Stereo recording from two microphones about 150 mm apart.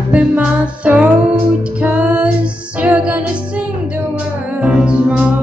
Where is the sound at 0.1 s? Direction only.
10° right (ahead or behind).